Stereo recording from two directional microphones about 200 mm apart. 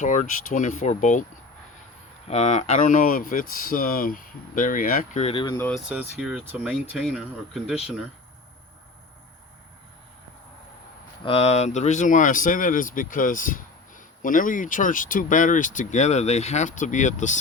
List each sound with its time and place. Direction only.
0.0 s speech: 40° left (ahead or behind)
2.2 s speech: 35° left (ahead or behind)
5.5 s speech: 10° left (ahead or behind)
5.9 s speech: 5° right (ahead or behind)
11.2 s speech: 30° left (ahead or behind)